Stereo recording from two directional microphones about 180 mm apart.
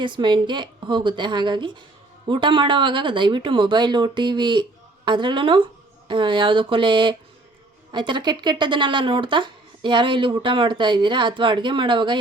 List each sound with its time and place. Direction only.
0.0 s speech: 25° right (ahead or behind)